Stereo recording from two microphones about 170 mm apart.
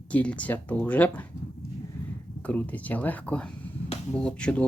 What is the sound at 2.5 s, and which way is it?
Speech, 10° left (ahead or behind).